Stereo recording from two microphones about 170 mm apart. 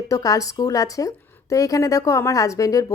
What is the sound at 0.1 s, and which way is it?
A woman's voice, 20° left (ahead or behind).